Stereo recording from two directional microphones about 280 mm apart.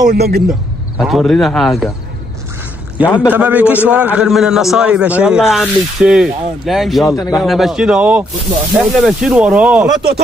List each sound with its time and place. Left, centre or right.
0.1 s speech: right
0.5 s speech: centre
3.2 s a man's voice: centre
7.1 s a man's voice: centre
7.3 s a man's voice: centre